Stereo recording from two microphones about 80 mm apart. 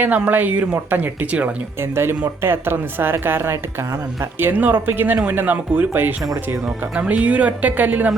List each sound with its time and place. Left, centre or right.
0.0 s a woman's voice: right
1.8 s a woman's voice: right